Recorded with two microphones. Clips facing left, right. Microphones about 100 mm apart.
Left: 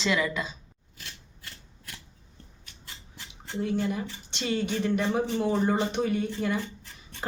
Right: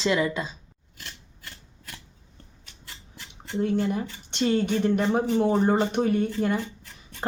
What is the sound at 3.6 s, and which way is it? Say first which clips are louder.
Speech: right 3 dB; 50° right (ahead or behind).